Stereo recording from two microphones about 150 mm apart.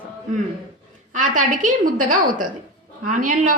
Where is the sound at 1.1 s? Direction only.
55° right (ahead or behind).